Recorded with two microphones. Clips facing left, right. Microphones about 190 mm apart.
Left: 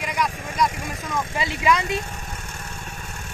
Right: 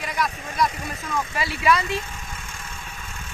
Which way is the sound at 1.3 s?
20° left (ahead or behind).